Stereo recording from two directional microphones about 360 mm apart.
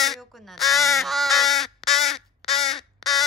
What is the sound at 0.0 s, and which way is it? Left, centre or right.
Crow, centre.